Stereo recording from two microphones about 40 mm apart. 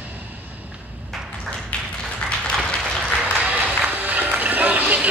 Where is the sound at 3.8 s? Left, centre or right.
Right.